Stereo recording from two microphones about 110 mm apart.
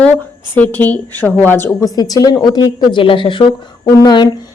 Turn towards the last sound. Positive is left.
turn(degrees=40)  # may be behind; listen again after turning